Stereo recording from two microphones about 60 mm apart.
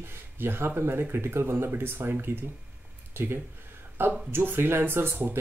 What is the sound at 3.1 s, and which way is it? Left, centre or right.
Speech, right.